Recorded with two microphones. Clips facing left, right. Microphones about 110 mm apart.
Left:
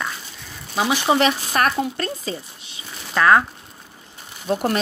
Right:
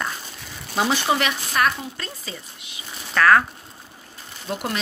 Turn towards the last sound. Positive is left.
turn(degrees=40)  # may be behind; listen again after turning